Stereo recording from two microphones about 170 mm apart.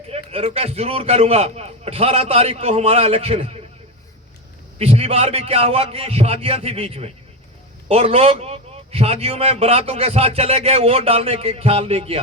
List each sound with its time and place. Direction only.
0.1 s a man's voice: 35° right (ahead or behind)
4.8 s a man's voice: 35° right (ahead or behind)